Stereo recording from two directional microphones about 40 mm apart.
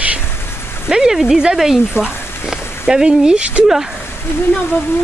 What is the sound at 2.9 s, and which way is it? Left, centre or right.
Speech, centre.